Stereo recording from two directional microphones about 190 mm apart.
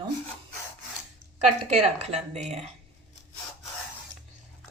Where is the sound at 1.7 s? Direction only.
35° right (ahead or behind).